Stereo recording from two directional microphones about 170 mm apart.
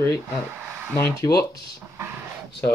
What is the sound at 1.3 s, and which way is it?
Speech, 65° left (ahead or behind).